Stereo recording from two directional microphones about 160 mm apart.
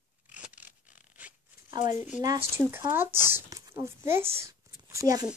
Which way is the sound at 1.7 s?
50° left (ahead or behind).